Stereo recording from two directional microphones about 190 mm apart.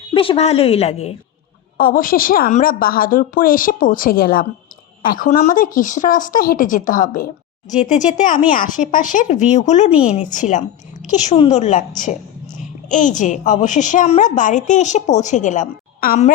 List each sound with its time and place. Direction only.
0.1 s a woman's voice: 30° left (ahead or behind)
1.8 s a woman's voice: 50° left (ahead or behind)